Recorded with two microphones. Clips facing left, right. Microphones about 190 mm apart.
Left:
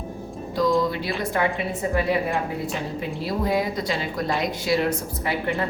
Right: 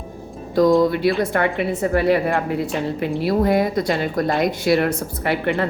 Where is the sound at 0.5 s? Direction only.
55° right (ahead or behind).